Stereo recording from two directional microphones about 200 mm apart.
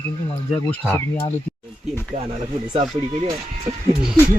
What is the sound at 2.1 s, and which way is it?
Speech, 30° right (ahead or behind).